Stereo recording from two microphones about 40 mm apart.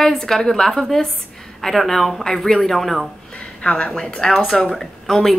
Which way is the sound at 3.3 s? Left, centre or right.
Left.